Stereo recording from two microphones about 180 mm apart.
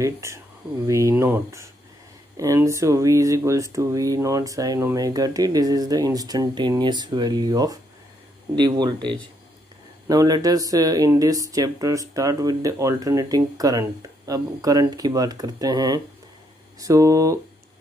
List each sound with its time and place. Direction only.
0.0 s speech: 15° right (ahead or behind)